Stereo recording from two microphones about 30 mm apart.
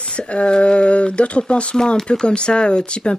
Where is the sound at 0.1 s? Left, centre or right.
Left.